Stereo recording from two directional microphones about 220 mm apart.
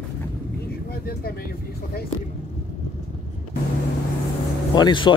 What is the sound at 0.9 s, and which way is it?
Vehicle, 45° left (ahead or behind).